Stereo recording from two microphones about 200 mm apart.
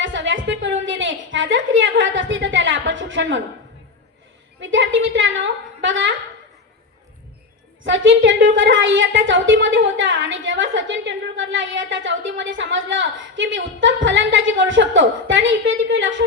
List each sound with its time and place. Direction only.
0.0 s a sound: 70° right (ahead or behind)
4.6 s a woman's voice: 70° right (ahead or behind)
7.9 s a woman's voice: 70° right (ahead or behind)